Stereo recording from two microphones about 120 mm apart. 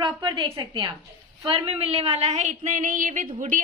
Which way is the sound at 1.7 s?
50° right (ahead or behind).